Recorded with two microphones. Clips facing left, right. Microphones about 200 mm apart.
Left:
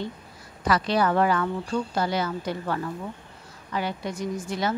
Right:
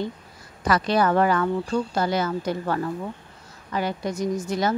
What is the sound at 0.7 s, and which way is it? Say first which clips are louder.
A woman's voice: right 2 dB; 45° right (ahead or behind).